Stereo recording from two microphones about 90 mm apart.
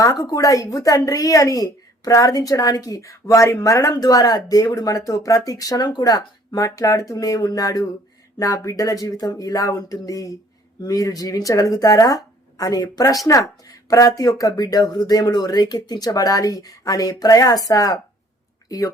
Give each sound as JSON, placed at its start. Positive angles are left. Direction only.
{"t": 0.0, "sound": "speech", "side_deg": 40}